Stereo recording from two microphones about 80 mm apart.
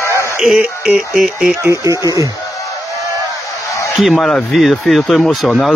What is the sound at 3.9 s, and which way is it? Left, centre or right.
Speech, centre.